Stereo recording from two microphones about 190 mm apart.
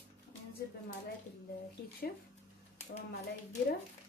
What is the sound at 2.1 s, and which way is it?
Speech, 55° left (ahead or behind).